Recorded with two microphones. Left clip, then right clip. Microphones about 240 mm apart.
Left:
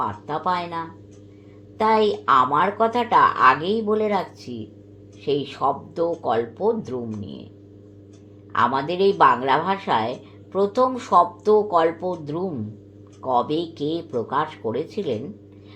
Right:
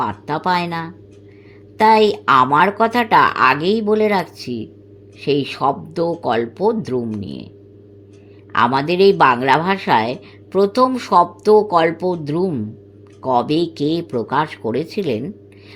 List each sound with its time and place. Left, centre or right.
0.0 s speech: right
8.5 s speech: right